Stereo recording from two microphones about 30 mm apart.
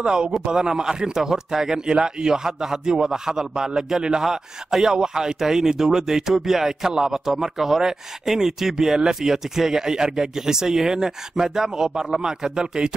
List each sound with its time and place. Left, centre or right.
0.0 s a man's voice: right
1.9 s a man's voice: right